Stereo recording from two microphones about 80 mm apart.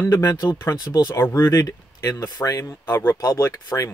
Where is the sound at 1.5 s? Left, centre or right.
Left.